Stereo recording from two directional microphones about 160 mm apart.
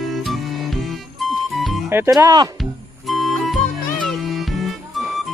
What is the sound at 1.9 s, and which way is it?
Speech, 20° right (ahead or behind).